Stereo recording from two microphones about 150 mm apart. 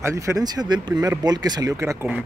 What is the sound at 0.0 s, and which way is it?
Speech, 20° right (ahead or behind).